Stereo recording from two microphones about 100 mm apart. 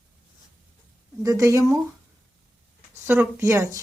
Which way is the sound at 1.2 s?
30° right (ahead or behind).